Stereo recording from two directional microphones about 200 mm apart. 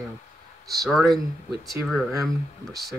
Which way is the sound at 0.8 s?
Centre (ahead or behind).